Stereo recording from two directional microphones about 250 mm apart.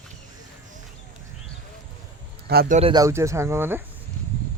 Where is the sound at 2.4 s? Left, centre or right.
Right.